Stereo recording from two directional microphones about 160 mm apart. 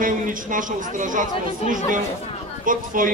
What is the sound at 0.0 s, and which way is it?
A man's voice, 55° right (ahead or behind).